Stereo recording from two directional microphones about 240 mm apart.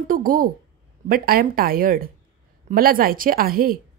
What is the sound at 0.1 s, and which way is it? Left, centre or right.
A woman's voice, right.